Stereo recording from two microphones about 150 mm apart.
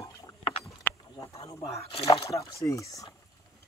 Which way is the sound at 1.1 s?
20° left (ahead or behind).